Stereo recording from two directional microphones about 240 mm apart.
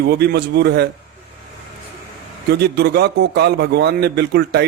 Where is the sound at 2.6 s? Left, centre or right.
Right.